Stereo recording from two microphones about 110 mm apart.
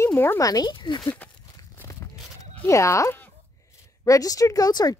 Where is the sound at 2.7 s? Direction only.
30° left (ahead or behind).